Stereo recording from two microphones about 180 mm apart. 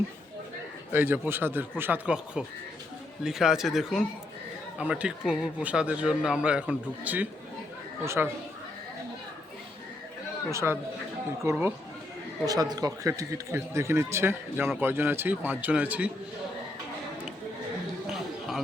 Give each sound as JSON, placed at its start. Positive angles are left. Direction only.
{"t": 0.9, "sound": "speech", "side_deg": -10}
{"t": 10.5, "sound": "speech", "side_deg": -15}
{"t": 18.1, "sound": "a sound", "side_deg": 0}